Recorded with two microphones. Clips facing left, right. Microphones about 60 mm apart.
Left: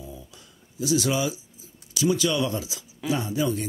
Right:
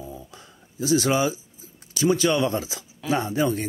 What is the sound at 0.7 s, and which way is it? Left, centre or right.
Speech, right.